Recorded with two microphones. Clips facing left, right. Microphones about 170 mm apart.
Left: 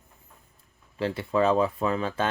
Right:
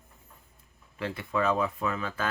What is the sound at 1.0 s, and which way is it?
Speech, 30° left (ahead or behind).